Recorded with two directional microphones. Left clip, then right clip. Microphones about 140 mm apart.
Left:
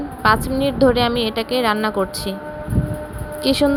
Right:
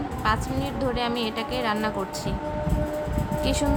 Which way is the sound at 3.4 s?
40° left (ahead or behind).